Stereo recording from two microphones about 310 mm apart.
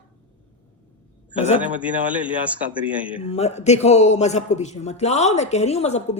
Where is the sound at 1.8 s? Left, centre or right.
Centre.